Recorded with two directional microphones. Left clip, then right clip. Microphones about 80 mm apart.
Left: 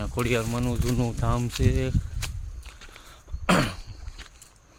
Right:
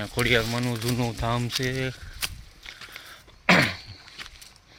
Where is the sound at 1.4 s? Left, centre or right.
Left.